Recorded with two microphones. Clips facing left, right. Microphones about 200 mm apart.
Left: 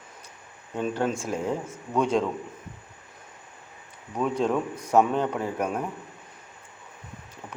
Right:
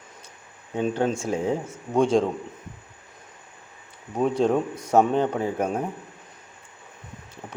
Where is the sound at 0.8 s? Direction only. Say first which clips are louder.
Right 3 dB; 25° right (ahead or behind).